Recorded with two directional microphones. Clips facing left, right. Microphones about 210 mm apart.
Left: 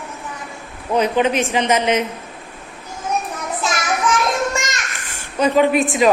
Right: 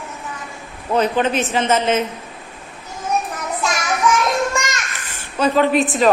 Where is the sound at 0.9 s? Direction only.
10° left (ahead or behind).